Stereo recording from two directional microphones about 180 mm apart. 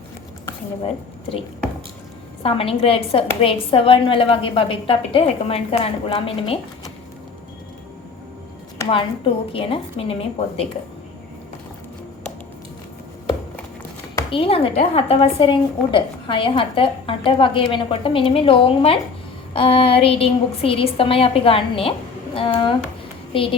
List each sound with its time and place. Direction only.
0.8 s a woman's voice: 30° left (ahead or behind)
8.9 s a woman's voice: 30° left (ahead or behind)
14.3 s a woman's voice: 30° left (ahead or behind)